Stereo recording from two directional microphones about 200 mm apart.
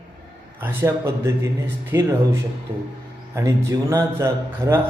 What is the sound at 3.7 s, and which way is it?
Speech, 15° right (ahead or behind).